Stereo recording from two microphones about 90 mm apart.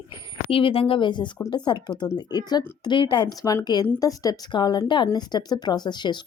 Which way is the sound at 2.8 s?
60° left (ahead or behind).